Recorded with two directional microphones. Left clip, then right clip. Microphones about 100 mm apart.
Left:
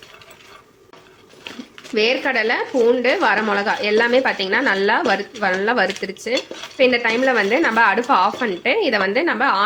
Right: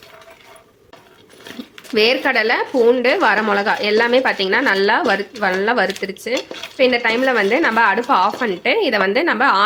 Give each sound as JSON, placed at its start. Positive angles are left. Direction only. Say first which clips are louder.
{"t": 2.0, "sound": "a woman's voice", "louder": "right 3 dB", "side_deg": -30}